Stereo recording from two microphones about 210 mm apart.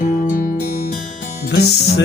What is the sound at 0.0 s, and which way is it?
Music, 40° left (ahead or behind).